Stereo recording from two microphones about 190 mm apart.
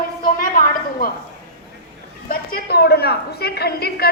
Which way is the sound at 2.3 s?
50° left (ahead or behind).